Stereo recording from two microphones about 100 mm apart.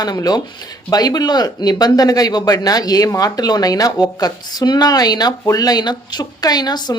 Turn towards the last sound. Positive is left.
turn(degrees=45)  # may be behind; listen again after turning